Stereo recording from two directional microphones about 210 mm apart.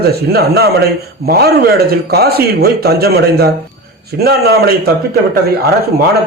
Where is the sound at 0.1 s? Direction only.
50° right (ahead or behind).